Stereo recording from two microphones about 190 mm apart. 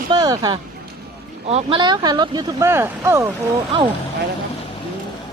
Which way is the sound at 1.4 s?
30° right (ahead or behind).